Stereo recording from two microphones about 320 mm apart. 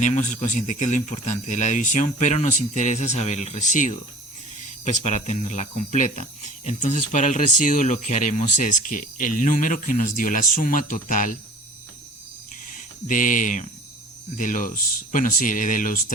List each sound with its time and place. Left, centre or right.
0.0 s speech: left
12.7 s speech: left